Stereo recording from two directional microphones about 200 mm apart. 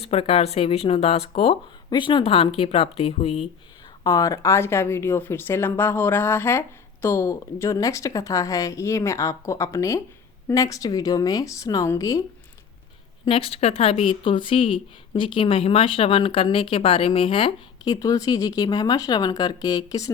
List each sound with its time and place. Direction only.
0.0 s speech: 30° left (ahead or behind)
4.0 s speech: 20° left (ahead or behind)
13.2 s speech: 30° left (ahead or behind)